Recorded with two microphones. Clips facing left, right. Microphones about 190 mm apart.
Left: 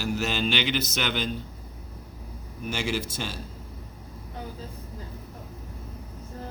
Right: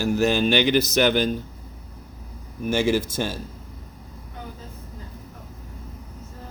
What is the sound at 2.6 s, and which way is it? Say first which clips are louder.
Speech: right 8 dB; 50° right (ahead or behind).